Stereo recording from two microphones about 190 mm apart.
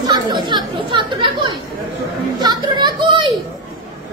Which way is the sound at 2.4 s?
20° right (ahead or behind).